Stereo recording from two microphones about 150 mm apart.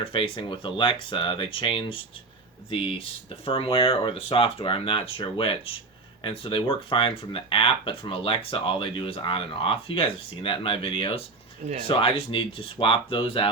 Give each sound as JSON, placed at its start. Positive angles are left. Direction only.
{"t": 0.0, "sound": "speech", "side_deg": 35}